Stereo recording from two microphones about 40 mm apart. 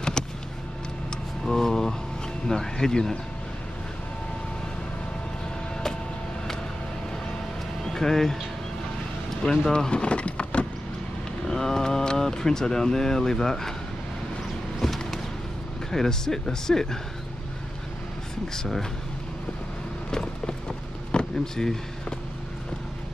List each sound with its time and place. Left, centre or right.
0.2 s vehicle: centre
1.4 s a sound: centre
2.4 s speech: centre
7.8 s speech: centre
9.5 s speech: centre
11.4 s speech: centre
14.8 s a sound: centre
15.9 s speech: centre
20.1 s a sound: centre